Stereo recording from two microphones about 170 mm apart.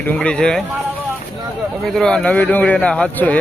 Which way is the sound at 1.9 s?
5° left (ahead or behind).